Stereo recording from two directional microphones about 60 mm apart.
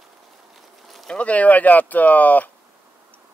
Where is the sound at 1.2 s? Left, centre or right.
Left.